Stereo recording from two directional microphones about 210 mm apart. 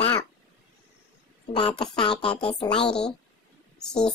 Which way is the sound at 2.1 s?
5° left (ahead or behind).